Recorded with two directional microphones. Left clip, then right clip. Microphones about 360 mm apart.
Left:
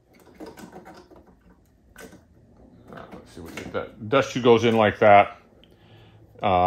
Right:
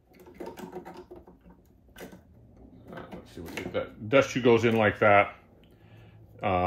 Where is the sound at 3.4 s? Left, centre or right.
Centre.